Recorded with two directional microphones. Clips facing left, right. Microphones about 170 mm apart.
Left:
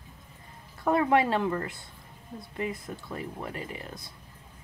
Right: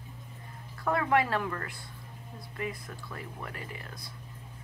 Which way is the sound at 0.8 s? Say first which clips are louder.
Left 4 dB; 20° left (ahead or behind).